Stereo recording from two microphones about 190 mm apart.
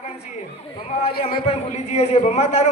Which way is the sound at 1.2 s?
35° left (ahead or behind).